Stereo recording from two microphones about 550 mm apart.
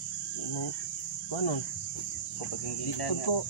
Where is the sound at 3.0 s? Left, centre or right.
Left.